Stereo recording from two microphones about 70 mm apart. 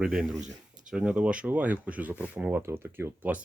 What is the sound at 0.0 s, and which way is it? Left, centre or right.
Speech, centre.